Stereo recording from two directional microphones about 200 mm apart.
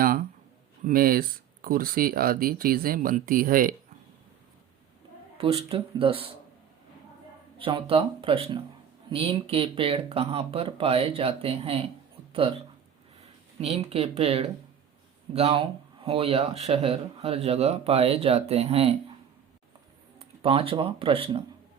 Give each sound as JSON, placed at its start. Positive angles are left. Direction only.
{"t": 0.0, "sound": "a sound", "side_deg": -45}
{"t": 0.9, "sound": "speech", "side_deg": -45}
{"t": 5.4, "sound": "speech", "side_deg": -30}
{"t": 7.6, "sound": "speech", "side_deg": -25}
{"t": 13.6, "sound": "speech", "side_deg": -30}
{"t": 20.1, "sound": "speech", "side_deg": -30}